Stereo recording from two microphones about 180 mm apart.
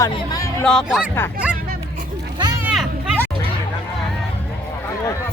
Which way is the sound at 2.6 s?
Centre (ahead or behind).